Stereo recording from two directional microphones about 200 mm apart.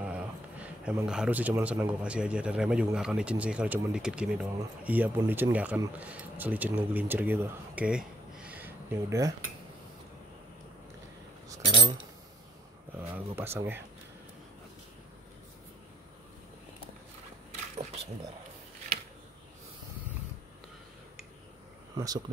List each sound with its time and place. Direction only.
0.0 s a man's voice: 5° right (ahead or behind)
11.6 s keys jangling: 25° right (ahead or behind)
13.0 s a man's voice: 10° right (ahead or behind)
21.9 s speech: 20° right (ahead or behind)